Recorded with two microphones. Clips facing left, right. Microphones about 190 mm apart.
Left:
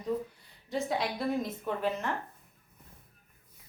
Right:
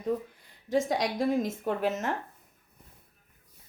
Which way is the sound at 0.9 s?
40° right (ahead or behind).